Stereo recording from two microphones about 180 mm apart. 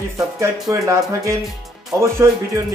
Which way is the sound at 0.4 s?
20° right (ahead or behind).